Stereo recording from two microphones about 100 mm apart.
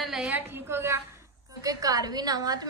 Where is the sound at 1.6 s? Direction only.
35° right (ahead or behind).